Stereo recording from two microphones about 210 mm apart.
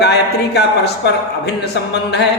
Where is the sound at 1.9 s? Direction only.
55° left (ahead or behind).